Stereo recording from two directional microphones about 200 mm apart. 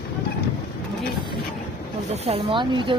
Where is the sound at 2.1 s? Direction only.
30° right (ahead or behind).